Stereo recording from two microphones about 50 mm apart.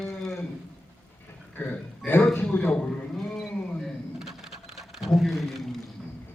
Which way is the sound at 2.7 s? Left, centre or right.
Centre.